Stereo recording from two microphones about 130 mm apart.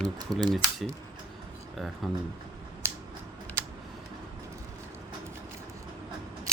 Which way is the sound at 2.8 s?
20° right (ahead or behind).